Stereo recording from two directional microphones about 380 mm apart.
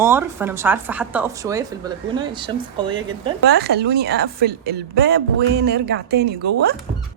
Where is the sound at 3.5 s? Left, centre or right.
Right.